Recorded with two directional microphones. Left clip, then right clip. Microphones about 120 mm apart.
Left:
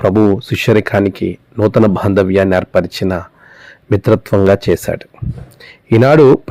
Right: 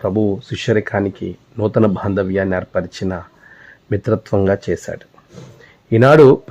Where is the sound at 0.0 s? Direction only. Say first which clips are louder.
Left 7 dB; 40° left (ahead or behind).